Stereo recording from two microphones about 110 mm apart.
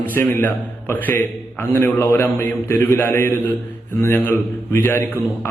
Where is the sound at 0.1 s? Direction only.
20° left (ahead or behind).